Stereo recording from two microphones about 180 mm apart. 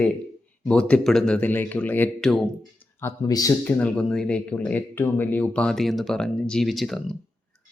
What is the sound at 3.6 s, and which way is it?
Speech, 10° left (ahead or behind).